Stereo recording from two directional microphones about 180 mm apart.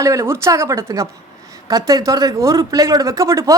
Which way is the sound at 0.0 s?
15° right (ahead or behind).